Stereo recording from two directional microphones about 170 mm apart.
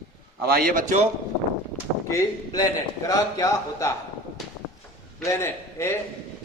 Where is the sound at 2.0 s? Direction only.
20° left (ahead or behind).